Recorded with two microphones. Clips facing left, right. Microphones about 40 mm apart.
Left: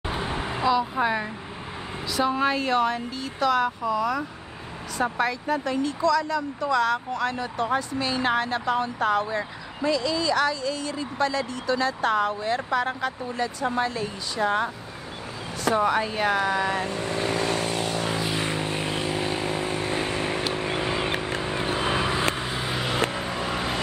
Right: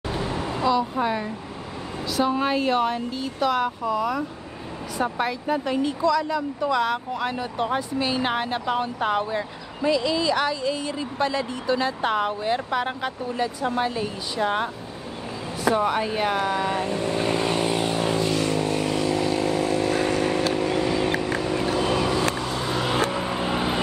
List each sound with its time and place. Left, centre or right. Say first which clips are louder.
0.1 s vehicle: right 2 dB; left
0.9 s speech: even; centre
2.1 s speech: right 1 dB; centre
15.8 s speech: even; centre
16.9 s speech: right 3 dB; right
17.3 s vehicle: right 2 dB; right
18.1 s vehicle: right 4 dB; centre
18.4 s vehicle: right 4 dB; left
23.1 s vehicle: right 3 dB; centre